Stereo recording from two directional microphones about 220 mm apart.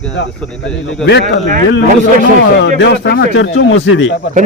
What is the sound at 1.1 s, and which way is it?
Speech, 50° left (ahead or behind).